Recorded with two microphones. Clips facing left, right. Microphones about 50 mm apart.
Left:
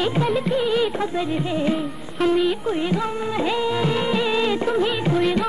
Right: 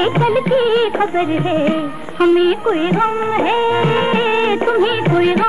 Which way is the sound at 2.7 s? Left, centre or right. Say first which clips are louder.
Right 8 dB; right.